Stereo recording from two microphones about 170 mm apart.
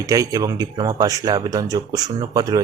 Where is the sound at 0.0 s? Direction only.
20° right (ahead or behind).